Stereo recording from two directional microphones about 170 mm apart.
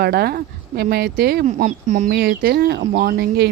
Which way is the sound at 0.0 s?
65° right (ahead or behind).